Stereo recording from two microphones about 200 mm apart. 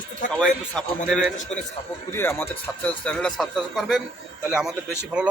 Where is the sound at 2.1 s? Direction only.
10° left (ahead or behind).